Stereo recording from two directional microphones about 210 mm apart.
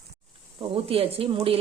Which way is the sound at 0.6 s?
25° right (ahead or behind).